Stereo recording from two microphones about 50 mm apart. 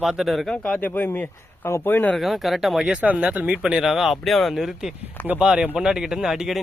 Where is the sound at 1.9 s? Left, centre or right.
Left.